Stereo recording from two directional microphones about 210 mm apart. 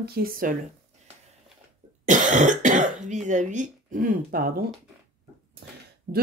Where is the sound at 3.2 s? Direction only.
35° right (ahead or behind).